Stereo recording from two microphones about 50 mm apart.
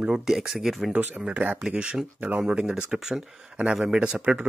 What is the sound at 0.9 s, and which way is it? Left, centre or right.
Speech, right.